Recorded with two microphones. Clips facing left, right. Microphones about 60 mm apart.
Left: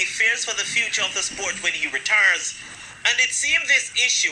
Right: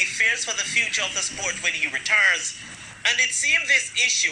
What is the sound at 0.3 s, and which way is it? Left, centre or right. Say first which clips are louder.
Speech: even; left.